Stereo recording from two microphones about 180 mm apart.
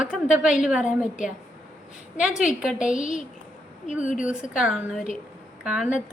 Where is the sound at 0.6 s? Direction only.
5° right (ahead or behind).